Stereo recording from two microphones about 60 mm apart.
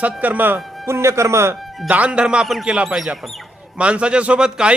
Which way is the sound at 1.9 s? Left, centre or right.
Right.